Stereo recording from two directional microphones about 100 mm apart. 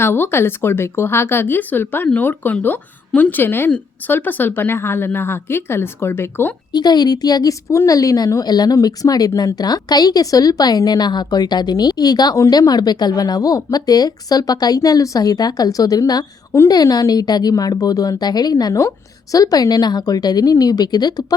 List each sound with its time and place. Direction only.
0.0 s a woman's voice: 20° left (ahead or behind)
6.7 s a woman's voice: 45° left (ahead or behind)